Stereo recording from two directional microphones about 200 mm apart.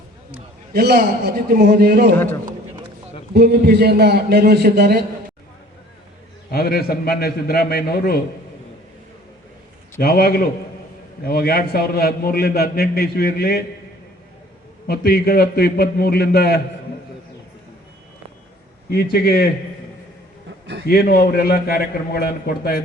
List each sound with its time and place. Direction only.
0.7 s a man's voice: 50° right (ahead or behind)
2.1 s a man's voice: 10° left (ahead or behind)
3.3 s a man's voice: 55° right (ahead or behind)
6.5 s a man's voice: 50° left (ahead or behind)
10.0 s a man's voice: 50° left (ahead or behind)
14.8 s a man's voice: 50° left (ahead or behind)
19.1 s a man's voice: 50° left (ahead or behind)
20.8 s a man's voice: 50° left (ahead or behind)